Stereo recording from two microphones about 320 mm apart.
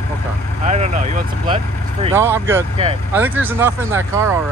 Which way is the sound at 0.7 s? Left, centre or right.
Right.